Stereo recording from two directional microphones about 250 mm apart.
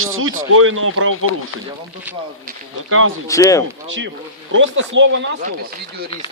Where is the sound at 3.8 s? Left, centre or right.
Right.